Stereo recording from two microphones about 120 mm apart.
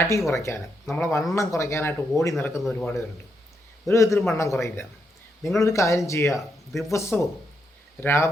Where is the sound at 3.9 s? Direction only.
25° left (ahead or behind).